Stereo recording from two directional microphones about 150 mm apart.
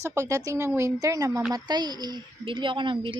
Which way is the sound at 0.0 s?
20° right (ahead or behind).